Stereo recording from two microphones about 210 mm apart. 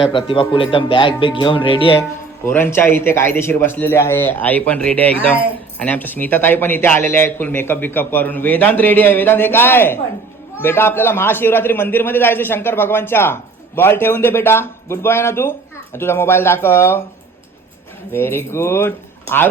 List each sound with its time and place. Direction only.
0.0 s speech: 25° left (ahead or behind)
2.5 s a man's voice: 10° left (ahead or behind)
18.1 s a man's voice: 10° left (ahead or behind)